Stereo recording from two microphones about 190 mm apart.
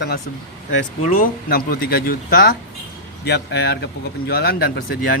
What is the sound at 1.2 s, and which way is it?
Speech, 50° left (ahead or behind).